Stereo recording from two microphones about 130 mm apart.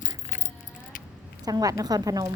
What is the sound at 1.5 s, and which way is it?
Speech, 25° right (ahead or behind).